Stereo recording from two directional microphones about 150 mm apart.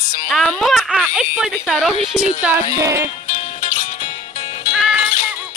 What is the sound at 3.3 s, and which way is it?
Music, 60° left (ahead or behind).